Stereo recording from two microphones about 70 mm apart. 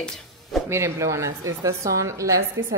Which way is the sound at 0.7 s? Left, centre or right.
Right.